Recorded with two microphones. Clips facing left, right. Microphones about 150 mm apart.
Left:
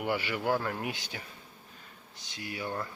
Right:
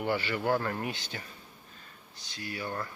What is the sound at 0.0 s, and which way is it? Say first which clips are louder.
Speech: right 1 dB; 10° left (ahead or behind).